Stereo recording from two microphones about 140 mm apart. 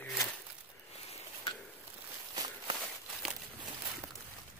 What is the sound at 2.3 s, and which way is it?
Walk, 30° right (ahead or behind).